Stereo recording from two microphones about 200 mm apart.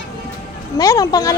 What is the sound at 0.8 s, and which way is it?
Female singing, 15° left (ahead or behind).